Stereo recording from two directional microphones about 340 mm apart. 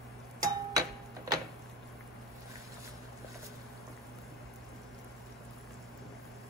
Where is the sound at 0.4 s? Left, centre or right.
Centre.